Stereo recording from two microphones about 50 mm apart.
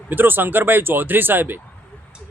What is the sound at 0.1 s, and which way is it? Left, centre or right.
Speech, right.